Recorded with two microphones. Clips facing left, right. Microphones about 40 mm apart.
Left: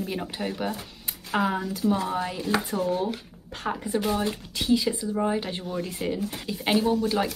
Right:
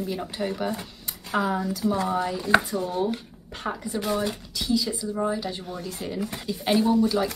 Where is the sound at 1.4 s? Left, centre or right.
Left.